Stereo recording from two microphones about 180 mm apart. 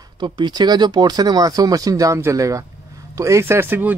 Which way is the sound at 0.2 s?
25° right (ahead or behind).